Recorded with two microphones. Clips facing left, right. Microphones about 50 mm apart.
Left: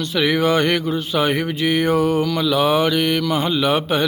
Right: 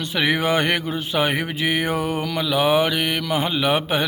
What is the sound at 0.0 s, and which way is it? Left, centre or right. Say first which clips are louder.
Speech: left 3 dB; right.